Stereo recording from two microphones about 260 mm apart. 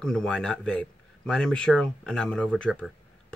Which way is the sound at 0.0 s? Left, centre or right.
Centre.